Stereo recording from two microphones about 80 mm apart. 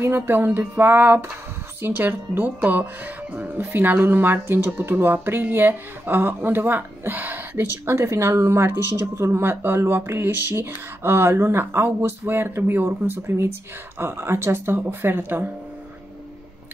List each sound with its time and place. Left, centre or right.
0.0 s speech: right